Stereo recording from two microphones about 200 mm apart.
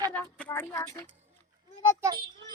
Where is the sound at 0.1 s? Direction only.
10° left (ahead or behind).